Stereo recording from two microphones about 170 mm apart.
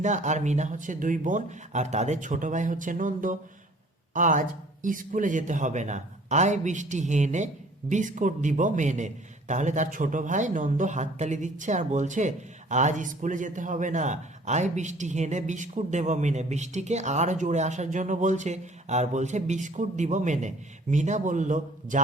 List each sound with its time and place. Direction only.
0.0 s speech: 45° right (ahead or behind)